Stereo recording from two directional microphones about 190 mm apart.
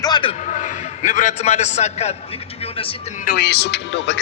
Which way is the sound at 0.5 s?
40° left (ahead or behind).